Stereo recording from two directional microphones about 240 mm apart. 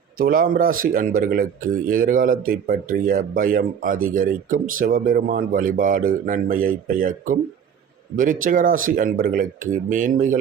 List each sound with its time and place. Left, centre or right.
0.2 s speech: right